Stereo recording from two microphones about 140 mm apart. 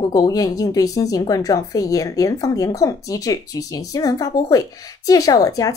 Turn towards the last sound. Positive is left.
turn(degrees=25)  # may be behind; listen again after turning